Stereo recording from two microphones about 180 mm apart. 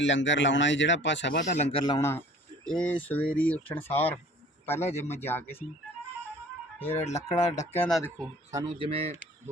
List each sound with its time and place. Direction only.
0.0 s speech: 90° left
1.5 s speech: 40° left (ahead or behind)
1.9 s speech: 15° left (ahead or behind)
4.9 s speech: 35° left (ahead or behind)
5.2 s speech: 10° left (ahead or behind)
6.7 s speech: 10° left (ahead or behind)
7.0 s speech: 40° left (ahead or behind)
8.2 s speech: 20° right (ahead or behind)
8.9 s speech: 35° right (ahead or behind)